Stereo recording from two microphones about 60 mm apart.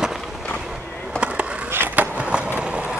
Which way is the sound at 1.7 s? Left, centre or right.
Right.